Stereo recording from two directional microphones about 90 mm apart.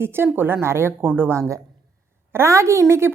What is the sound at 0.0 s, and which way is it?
A woman's voice, 25° right (ahead or behind).